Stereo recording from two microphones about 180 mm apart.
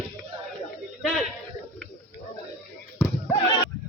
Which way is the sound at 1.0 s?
Centre (ahead or behind).